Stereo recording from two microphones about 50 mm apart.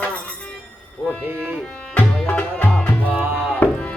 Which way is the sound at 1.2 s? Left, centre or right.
Right.